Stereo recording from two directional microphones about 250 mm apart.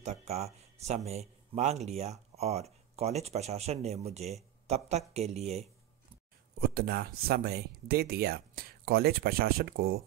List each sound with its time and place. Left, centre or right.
0.0 s a man's voice: right
6.7 s speech: right